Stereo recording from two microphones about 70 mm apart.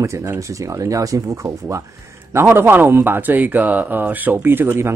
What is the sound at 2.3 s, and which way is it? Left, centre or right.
A man's voice, right.